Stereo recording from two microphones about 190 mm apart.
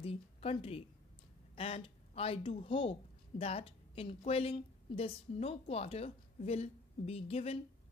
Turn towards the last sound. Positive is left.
turn(degrees=30)  # may be behind; listen again after turning